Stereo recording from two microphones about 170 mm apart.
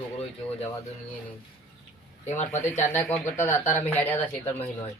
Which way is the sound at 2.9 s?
10° left (ahead or behind).